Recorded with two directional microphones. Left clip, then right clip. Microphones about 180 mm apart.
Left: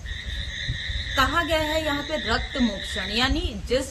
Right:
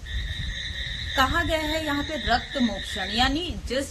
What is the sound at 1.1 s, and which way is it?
Speech, 15° left (ahead or behind).